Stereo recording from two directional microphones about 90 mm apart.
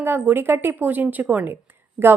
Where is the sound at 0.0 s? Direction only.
25° right (ahead or behind).